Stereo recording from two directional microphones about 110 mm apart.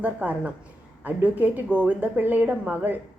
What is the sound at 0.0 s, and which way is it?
A woman's voice, 15° right (ahead or behind).